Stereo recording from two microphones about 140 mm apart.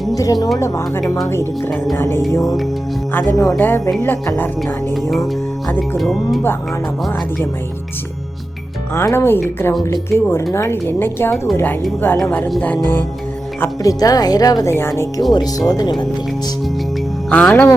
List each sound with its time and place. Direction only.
0.1 s a woman's voice: 25° left (ahead or behind)
3.1 s a woman's voice: 15° left (ahead or behind)
6.0 s speech: centre (ahead or behind)
9.0 s a woman's voice: 15° left (ahead or behind)
13.6 s speech: 25° left (ahead or behind)
17.2 s a woman's voice: 10° left (ahead or behind)